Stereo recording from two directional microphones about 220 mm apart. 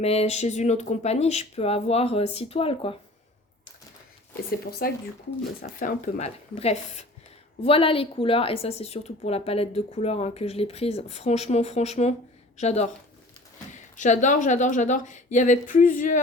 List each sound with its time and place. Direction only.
0.0 s a woman's voice: 30° left (ahead or behind)
4.8 s a woman's voice: 40° left (ahead or behind)
13.9 s a woman's voice: 35° left (ahead or behind)